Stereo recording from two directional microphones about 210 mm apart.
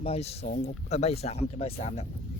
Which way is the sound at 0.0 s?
30° left (ahead or behind).